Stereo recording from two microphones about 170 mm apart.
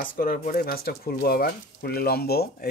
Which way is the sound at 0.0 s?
55° left (ahead or behind).